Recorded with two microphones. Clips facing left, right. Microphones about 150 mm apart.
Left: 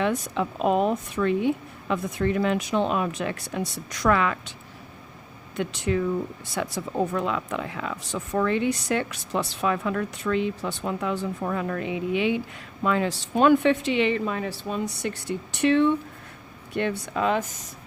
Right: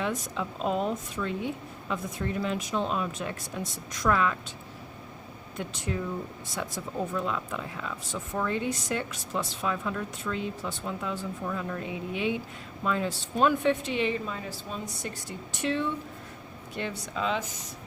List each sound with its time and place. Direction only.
0.0 s speech: 65° left (ahead or behind)
5.5 s speech: 75° left (ahead or behind); by 17.6 s 55° left (ahead or behind)